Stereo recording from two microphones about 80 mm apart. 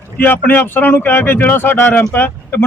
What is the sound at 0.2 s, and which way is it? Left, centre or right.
Speech, left.